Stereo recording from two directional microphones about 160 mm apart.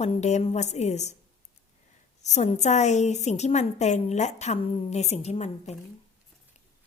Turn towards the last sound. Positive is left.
turn(degrees=45)  # may be behind; listen again after turning